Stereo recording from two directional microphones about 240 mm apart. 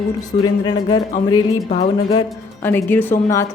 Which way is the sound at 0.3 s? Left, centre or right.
Centre.